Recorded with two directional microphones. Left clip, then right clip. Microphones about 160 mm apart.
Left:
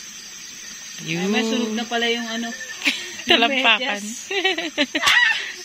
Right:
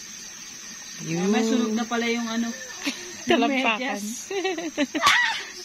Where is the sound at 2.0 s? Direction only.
90° right.